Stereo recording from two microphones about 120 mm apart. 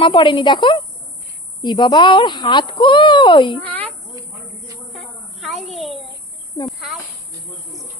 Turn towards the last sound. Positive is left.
turn(degrees=-5)  # may be behind; listen again after turning